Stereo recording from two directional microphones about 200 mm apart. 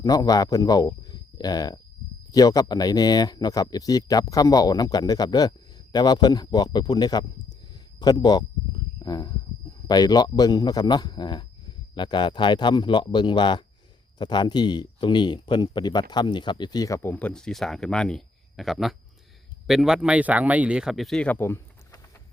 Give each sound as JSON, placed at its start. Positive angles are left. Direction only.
{"t": 0.0, "sound": "speech", "side_deg": 20}